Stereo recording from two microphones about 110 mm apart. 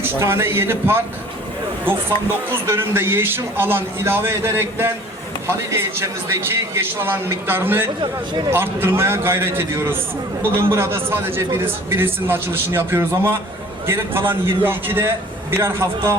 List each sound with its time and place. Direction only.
0.2 s a man's voice: 20° right (ahead or behind)
2.6 s a man's voice: 20° right (ahead or behind)